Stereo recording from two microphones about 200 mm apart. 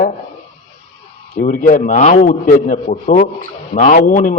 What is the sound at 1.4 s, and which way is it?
A man's voice, 45° left (ahead or behind).